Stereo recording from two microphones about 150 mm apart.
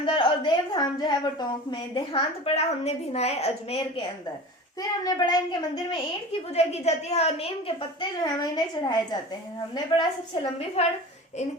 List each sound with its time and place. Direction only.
0.0 s a woman's voice: 35° left (ahead or behind)
4.8 s a child's voice: 25° left (ahead or behind)
6.5 s a woman's voice: 45° left (ahead or behind)
8.1 s a child's voice: 30° left (ahead or behind)